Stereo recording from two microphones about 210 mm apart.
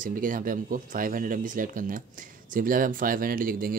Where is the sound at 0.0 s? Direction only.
40° right (ahead or behind).